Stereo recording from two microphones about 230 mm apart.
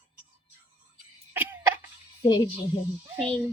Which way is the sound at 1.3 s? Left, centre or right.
Centre.